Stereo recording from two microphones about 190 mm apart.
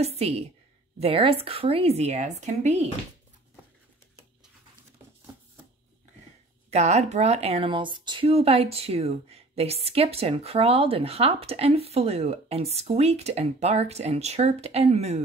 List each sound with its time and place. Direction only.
0.0 s speech: 35° right (ahead or behind)
6.7 s speech: 35° right (ahead or behind)